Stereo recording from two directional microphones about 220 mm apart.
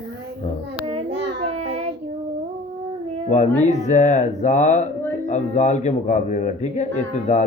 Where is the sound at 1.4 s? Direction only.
30° right (ahead or behind).